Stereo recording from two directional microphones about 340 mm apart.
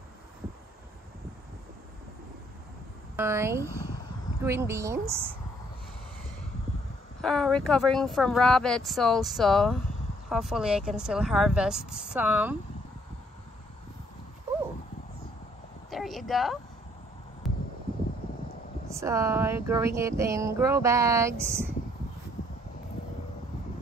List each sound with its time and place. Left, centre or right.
3.2 s speech: centre
7.2 s speech: centre
15.9 s a sound: centre
18.9 s speech: centre